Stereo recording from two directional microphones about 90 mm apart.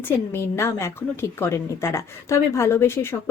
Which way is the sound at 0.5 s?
30° left (ahead or behind).